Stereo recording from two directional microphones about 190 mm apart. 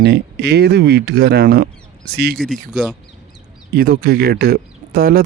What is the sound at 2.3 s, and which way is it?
Speech, centre (ahead or behind).